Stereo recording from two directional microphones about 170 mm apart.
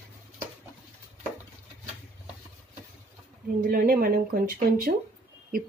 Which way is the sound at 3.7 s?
60° right (ahead or behind).